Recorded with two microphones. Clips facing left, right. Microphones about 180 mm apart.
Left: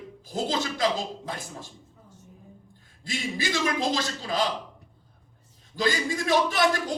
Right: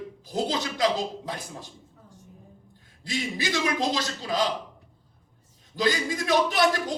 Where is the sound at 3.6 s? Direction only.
20° right (ahead or behind).